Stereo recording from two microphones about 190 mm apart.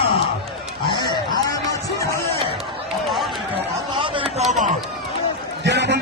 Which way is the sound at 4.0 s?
25° right (ahead or behind).